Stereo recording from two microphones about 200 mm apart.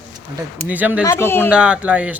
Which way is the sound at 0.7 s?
10° right (ahead or behind).